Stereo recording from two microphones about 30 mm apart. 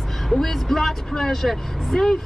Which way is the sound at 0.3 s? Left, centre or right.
Centre.